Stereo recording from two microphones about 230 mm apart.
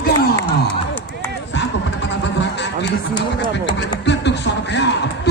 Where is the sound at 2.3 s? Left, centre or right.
Left.